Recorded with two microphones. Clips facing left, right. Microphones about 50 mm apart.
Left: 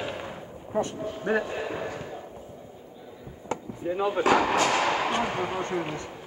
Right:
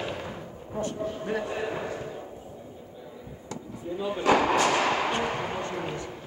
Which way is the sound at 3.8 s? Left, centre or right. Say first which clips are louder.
Left 5 dB; left.